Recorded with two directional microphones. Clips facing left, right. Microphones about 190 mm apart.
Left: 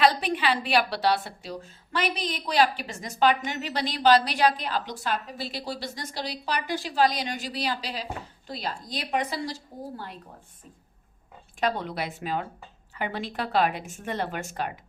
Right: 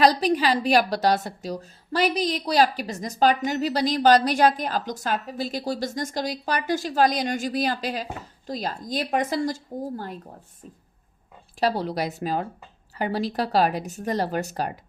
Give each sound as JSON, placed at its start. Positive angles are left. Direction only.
{"t": 0.0, "sound": "a woman's voice", "side_deg": -40}
{"t": 11.6, "sound": "speech", "side_deg": -35}